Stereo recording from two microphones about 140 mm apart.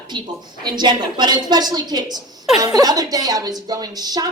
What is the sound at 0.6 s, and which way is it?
A woman's voice, 30° right (ahead or behind).